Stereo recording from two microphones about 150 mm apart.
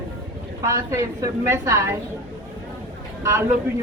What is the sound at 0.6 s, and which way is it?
A woman's voice, 20° right (ahead or behind).